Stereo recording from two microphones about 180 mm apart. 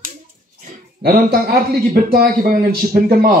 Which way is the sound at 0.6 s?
55° right (ahead or behind).